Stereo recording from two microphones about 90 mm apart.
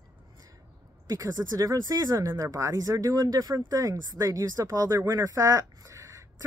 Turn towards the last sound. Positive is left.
turn(degrees=-35)  # may be behind; listen again after turning